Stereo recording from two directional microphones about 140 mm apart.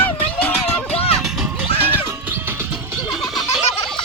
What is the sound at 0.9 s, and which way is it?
Music, 45° left (ahead or behind).